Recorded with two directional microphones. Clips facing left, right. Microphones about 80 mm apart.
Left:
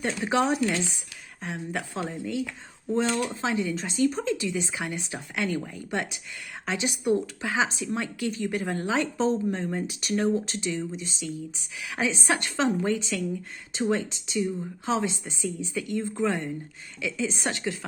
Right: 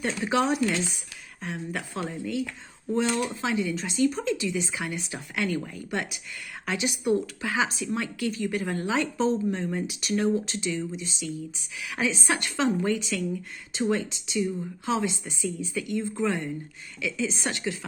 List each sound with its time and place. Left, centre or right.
0.0 s a woman's voice: left
1.5 s a woman's voice: left